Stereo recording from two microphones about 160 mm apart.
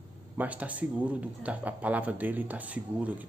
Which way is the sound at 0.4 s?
10° right (ahead or behind).